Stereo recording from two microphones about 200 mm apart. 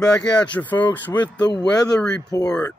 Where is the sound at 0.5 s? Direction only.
10° left (ahead or behind).